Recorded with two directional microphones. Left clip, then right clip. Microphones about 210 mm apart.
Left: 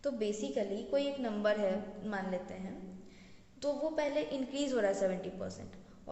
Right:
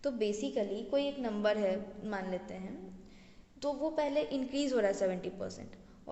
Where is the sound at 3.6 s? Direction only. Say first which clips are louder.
Even; 35° right (ahead or behind).